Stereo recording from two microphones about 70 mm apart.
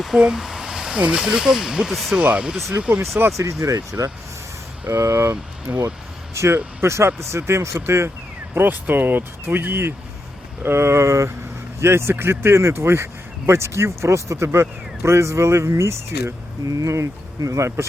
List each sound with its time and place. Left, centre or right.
0.2 s a sound: centre
1.0 s speech: centre
2.2 s speech: centre
3.3 s speech: right
5.3 s speech: right
6.3 s speech: right
8.5 s speech: right